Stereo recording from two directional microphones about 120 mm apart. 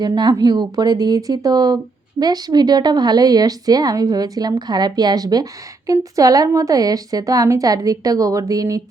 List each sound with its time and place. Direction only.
0.0 s speech: 35° right (ahead or behind)